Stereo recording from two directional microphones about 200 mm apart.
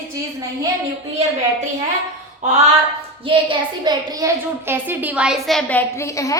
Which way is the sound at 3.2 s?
25° right (ahead or behind).